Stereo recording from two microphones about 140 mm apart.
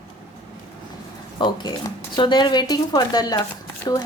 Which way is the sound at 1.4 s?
35° left (ahead or behind).